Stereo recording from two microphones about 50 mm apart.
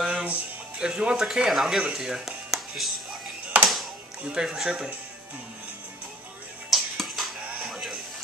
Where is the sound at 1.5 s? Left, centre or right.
Centre.